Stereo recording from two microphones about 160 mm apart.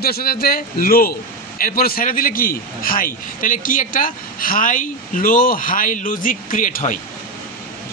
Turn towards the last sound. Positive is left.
turn(degrees=60)  # may be behind; listen again after turning